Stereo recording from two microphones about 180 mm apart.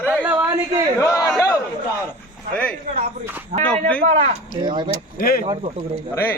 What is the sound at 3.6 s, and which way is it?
Speech, 10° left (ahead or behind).